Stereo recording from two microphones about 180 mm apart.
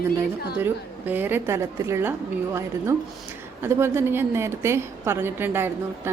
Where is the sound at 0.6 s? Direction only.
10° right (ahead or behind).